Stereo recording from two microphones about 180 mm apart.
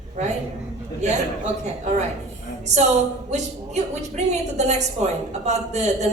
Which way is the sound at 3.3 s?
40° right (ahead or behind).